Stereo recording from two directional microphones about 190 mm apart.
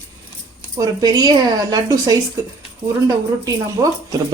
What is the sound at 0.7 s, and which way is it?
A woman's voice, 20° right (ahead or behind).